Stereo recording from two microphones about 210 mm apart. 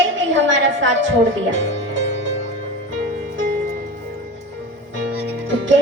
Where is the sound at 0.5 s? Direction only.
60° right (ahead or behind).